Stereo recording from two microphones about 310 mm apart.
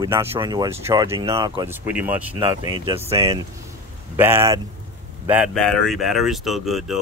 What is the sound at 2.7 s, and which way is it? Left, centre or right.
Speech, centre.